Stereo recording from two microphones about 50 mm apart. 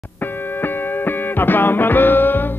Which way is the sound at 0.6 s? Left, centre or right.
Left.